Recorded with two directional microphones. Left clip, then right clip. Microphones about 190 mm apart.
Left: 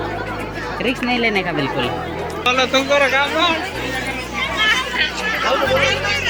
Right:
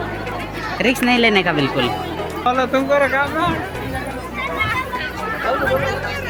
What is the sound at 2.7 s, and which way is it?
Speech, 35° right (ahead or behind).